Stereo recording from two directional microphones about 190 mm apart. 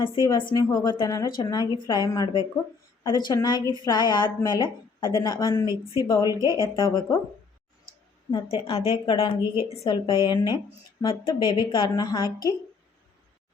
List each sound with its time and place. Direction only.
0.0 s a woman's voice: 25° left (ahead or behind)
6.4 s speech: 15° right (ahead or behind)
6.7 s a woman's voice: 25° left (ahead or behind)
8.3 s a woman's voice: 25° left (ahead or behind)